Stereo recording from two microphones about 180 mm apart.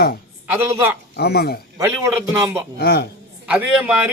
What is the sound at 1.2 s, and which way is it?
Speech, 60° left (ahead or behind).